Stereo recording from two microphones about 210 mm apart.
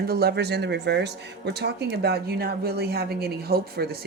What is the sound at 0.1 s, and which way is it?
Speech, 50° right (ahead or behind).